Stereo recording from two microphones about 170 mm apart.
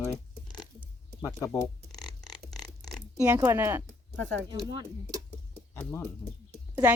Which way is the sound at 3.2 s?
15° right (ahead or behind).